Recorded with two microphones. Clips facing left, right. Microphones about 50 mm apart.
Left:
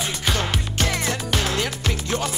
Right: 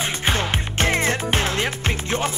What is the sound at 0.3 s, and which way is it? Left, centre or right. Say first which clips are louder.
Music: right 1 dB; right.